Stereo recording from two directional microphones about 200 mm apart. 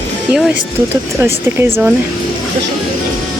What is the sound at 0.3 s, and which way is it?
Speech, 5° right (ahead or behind).